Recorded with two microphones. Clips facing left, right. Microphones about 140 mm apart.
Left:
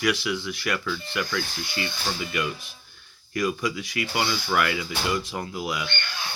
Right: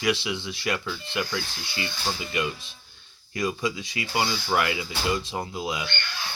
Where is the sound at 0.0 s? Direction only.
25° right (ahead or behind).